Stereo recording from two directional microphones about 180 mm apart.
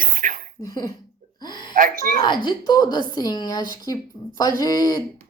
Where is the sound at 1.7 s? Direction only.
50° right (ahead or behind).